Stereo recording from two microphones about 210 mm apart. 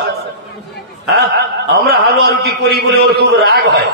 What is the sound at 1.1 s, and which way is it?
A man's voice, 50° right (ahead or behind).